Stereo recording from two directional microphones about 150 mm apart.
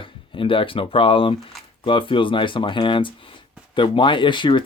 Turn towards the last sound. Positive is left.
turn(degrees=30)  # may be behind; listen again after turning